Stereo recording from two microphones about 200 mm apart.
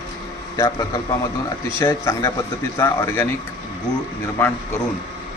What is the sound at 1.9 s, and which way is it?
Speech, 15° left (ahead or behind).